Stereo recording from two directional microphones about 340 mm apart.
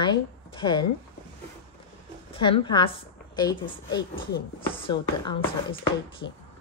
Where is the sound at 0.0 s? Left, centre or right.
Centre.